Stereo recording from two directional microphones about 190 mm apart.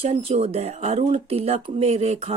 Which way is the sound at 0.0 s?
30° right (ahead or behind).